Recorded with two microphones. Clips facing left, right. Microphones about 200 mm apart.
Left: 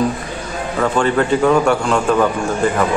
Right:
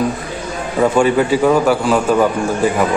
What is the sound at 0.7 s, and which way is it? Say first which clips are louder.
A man's voice: right 3 dB; 10° right (ahead or behind).